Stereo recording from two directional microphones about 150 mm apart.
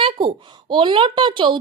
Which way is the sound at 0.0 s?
35° right (ahead or behind).